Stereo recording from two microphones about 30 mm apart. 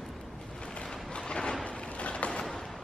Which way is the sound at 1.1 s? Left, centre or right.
Left.